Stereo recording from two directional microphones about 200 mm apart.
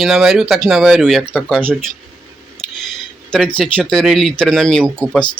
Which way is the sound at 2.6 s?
Centre (ahead or behind).